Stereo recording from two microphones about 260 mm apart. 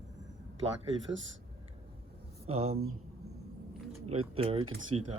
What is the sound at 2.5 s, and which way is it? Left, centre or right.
Speech, right.